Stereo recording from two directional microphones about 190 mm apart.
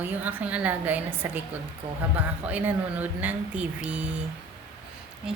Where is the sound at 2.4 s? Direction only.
10° right (ahead or behind).